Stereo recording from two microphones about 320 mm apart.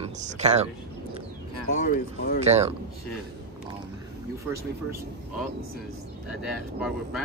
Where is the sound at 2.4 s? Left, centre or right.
Centre.